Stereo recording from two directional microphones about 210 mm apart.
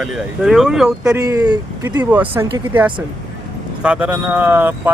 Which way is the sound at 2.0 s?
10° right (ahead or behind).